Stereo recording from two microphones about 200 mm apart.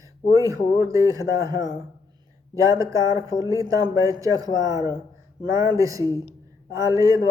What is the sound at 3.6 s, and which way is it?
Speech, 15° right (ahead or behind).